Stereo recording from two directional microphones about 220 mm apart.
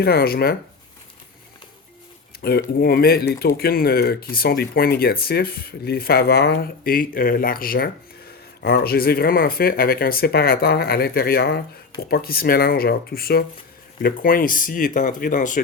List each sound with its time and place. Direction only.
0.0 s speech: 45° left (ahead or behind)
2.4 s speech: 45° left (ahead or behind)